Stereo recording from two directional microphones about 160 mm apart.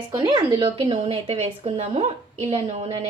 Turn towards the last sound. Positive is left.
turn(degrees=-40)  # may be behind; listen again after turning